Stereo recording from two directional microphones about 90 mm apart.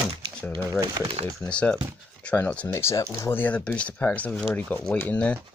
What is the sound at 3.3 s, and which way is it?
Speech, 20° left (ahead or behind).